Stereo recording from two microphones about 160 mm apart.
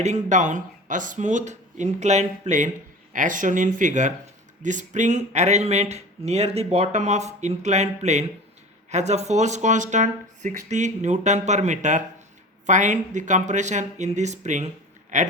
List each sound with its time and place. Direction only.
0.0 s speech: 50° right (ahead or behind)